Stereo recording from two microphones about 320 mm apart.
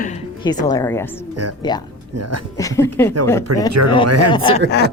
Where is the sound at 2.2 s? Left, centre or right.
Right.